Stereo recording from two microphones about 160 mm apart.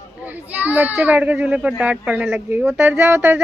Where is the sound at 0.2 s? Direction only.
10° right (ahead or behind).